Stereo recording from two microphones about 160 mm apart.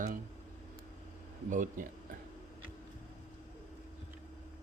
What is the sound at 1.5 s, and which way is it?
Speech, 55° right (ahead or behind).